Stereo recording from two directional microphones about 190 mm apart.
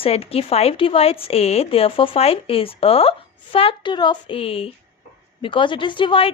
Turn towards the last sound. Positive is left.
turn(degrees=25)  # may be behind; listen again after turning